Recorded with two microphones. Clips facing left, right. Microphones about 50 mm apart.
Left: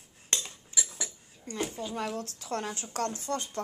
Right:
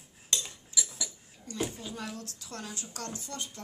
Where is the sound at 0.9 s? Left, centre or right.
Left.